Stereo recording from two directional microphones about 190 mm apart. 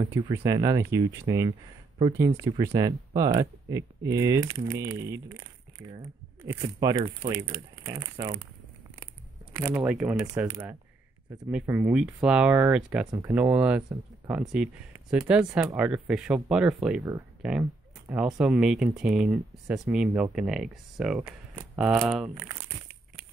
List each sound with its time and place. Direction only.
0.2 s speech: 15° right (ahead or behind)
6.4 s speech: 15° right (ahead or behind)
9.6 s speech: 15° right (ahead or behind)
11.5 s speech: 10° right (ahead or behind)